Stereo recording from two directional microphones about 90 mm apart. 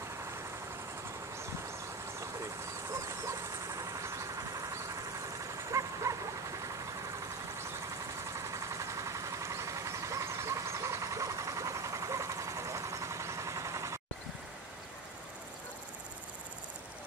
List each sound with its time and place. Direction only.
2.1 s vehicle: 35° right (ahead or behind)